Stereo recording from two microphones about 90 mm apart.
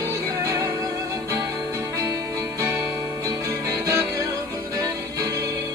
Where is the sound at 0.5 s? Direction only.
30° right (ahead or behind).